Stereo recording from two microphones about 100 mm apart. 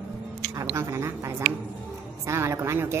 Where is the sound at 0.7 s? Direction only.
30° right (ahead or behind).